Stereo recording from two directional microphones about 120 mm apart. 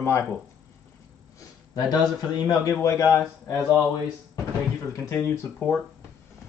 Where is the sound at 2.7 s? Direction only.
25° left (ahead or behind).